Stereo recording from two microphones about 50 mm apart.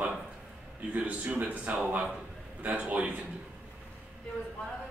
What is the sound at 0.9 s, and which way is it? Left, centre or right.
A man's voice, right.